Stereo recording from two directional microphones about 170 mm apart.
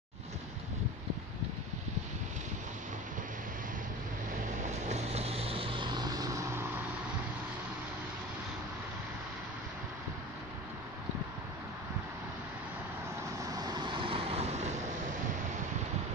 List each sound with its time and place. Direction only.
4.6 s vehicle: 40° right (ahead or behind); by 6.7 s 15° right (ahead or behind)
13.5 s vehicle: 20° right (ahead or behind); by 14.7 s 40° right (ahead or behind)